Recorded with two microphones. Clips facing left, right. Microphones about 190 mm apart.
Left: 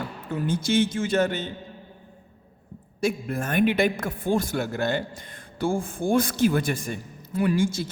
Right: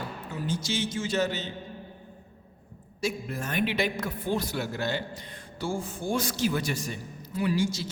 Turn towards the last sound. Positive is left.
turn(degrees=50)  # may be behind; listen again after turning